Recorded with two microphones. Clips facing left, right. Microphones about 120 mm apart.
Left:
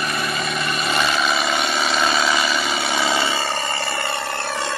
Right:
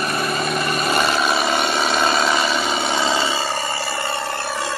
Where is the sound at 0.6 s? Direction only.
45° right (ahead or behind).